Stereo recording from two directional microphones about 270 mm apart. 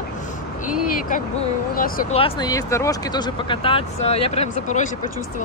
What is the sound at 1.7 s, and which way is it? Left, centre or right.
Speech, left.